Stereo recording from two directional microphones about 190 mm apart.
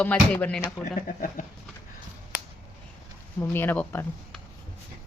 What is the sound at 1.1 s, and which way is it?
Speech, 45° left (ahead or behind).